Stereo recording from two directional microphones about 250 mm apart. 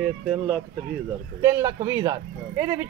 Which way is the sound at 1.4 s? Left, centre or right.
Centre.